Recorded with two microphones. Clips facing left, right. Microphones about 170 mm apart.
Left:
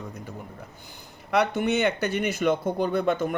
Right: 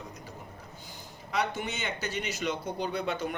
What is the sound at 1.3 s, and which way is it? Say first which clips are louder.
Speech: left 9 dB; 65° left (ahead or behind).